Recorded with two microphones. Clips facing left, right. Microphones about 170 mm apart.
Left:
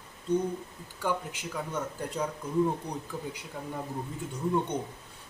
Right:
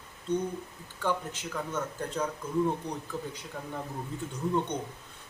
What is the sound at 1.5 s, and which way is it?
A man's voice, 10° left (ahead or behind).